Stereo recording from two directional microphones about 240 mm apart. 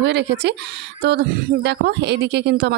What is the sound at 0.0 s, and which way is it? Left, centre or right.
Speech, right.